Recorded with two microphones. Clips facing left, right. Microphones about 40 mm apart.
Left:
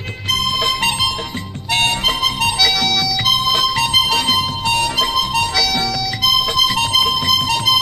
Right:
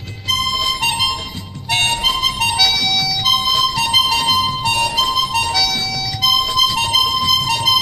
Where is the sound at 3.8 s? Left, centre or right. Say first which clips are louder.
Even; centre.